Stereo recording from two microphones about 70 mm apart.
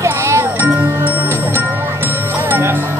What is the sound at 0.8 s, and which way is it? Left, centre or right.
Music, right.